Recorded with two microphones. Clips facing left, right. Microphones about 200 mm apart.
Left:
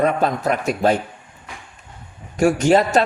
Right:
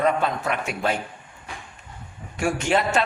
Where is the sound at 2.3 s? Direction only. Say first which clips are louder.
Left 8 dB; 40° left (ahead or behind).